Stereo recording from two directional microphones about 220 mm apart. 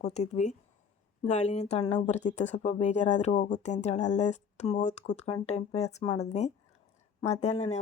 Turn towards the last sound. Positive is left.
turn(degrees=30)  # may be behind; listen again after turning